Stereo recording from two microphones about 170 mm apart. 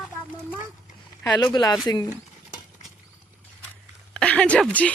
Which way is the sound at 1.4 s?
25° left (ahead or behind).